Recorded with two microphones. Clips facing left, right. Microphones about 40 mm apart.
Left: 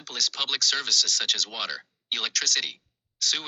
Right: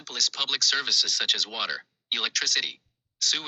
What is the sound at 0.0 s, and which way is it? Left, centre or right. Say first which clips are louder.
Speech: even; centre.